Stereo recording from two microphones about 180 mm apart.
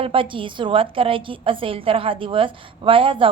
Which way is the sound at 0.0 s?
30° right (ahead or behind).